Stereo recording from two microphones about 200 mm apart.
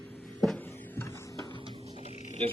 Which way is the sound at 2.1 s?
35° left (ahead or behind).